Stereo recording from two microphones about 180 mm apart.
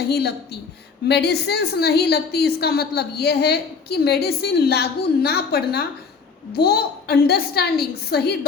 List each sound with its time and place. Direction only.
0.1 s a woman's voice: 65° left (ahead or behind)